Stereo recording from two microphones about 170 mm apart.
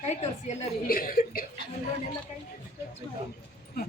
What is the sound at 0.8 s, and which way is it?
Speech, 60° left (ahead or behind).